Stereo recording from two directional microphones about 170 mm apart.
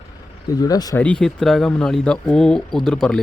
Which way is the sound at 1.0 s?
5° left (ahead or behind).